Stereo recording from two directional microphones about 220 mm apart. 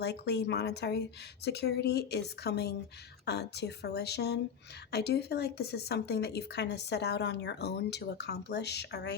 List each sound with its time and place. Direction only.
0.0 s a woman's voice: 50° left (ahead or behind)